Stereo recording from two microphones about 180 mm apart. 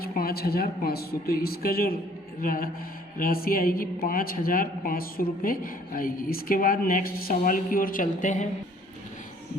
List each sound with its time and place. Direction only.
0.0 s a woman's voice: 55° left (ahead or behind)